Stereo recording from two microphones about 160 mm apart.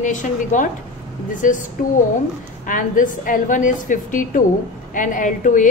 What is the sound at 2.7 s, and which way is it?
A woman's voice, 55° left (ahead or behind).